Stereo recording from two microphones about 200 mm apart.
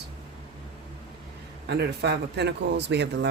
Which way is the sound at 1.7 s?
55° right (ahead or behind).